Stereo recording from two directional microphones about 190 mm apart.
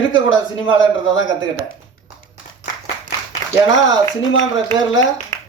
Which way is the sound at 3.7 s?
80° left.